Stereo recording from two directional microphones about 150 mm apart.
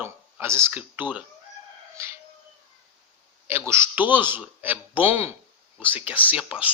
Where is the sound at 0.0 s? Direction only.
15° right (ahead or behind).